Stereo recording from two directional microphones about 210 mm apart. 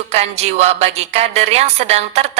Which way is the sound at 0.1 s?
30° right (ahead or behind).